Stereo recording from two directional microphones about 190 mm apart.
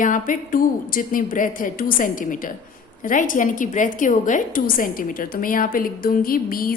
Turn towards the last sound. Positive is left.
turn(degrees=50)  # may be behind; listen again after turning